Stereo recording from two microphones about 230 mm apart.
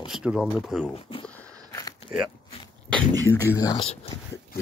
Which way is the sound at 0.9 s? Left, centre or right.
Left.